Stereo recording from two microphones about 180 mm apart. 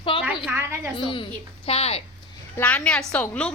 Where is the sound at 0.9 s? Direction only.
30° left (ahead or behind).